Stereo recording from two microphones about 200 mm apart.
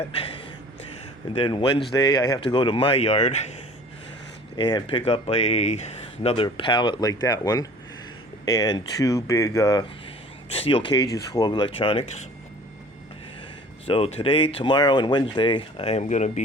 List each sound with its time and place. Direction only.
0.2 s speech: 30° left (ahead or behind)
4.5 s speech: 20° left (ahead or behind)
10.5 s speech: 30° left (ahead or behind)
13.8 s speech: 30° left (ahead or behind)